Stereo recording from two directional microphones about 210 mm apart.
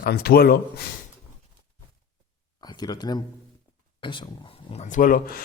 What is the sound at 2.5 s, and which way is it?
Speech, 20° left (ahead or behind).